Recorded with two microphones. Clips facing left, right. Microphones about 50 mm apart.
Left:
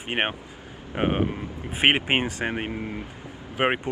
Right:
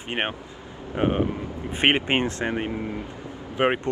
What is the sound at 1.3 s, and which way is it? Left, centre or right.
Speech, centre.